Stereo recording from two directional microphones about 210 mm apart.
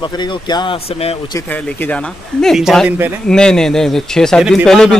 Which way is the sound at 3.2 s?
5° left (ahead or behind).